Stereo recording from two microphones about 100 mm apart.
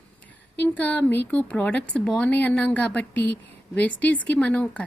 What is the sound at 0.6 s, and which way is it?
Speech, 15° left (ahead or behind).